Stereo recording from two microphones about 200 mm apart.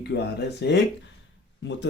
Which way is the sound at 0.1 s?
60° left (ahead or behind).